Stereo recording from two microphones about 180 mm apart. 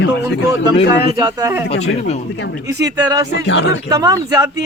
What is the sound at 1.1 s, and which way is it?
Speech, 20° right (ahead or behind).